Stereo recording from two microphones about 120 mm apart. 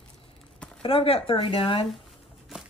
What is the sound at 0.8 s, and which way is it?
Speech, 50° left (ahead or behind).